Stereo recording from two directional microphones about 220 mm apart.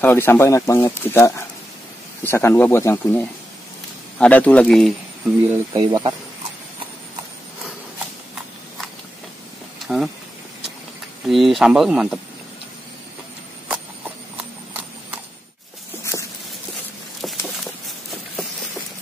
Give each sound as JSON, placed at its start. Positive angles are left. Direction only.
{"t": 0.0, "sound": "speech", "side_deg": 10}
{"t": 5.5, "sound": "speech", "side_deg": -15}
{"t": 9.8, "sound": "speech", "side_deg": 0}
{"t": 11.2, "sound": "speech", "side_deg": 0}
{"t": 14.3, "sound": "clip-clop", "side_deg": -5}
{"t": 16.0, "sound": "a sound", "side_deg": 15}